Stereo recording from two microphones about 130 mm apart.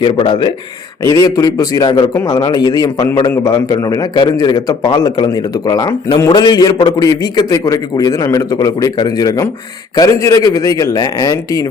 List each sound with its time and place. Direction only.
0.0 s a man's voice: 40° left (ahead or behind)
1.0 s a man's voice: 25° left (ahead or behind)